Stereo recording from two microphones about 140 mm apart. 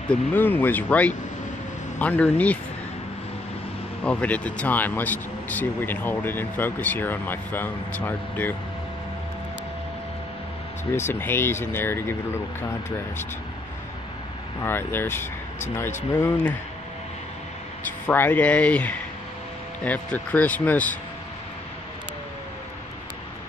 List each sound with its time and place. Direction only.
0.1 s speech: 15° left (ahead or behind)
4.0 s speech: 10° left (ahead or behind)
11.0 s speech: 15° left (ahead or behind)
14.6 s speech: 15° left (ahead or behind)
18.0 s speech: 15° left (ahead or behind)